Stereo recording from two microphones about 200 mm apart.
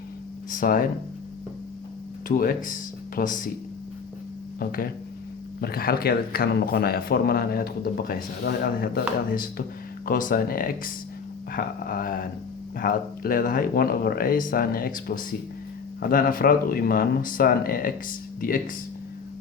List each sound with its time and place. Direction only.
0.5 s speech: 45° left (ahead or behind)
2.2 s speech: 40° left (ahead or behind)
4.6 s speech: 45° left (ahead or behind)